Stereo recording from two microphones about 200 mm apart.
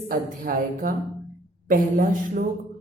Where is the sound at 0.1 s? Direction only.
45° right (ahead or behind).